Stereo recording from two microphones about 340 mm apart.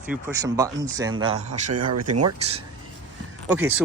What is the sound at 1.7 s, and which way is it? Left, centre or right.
Speech, right.